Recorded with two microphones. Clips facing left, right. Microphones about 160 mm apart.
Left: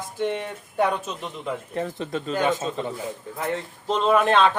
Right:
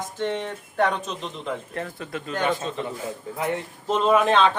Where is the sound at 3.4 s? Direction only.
15° right (ahead or behind).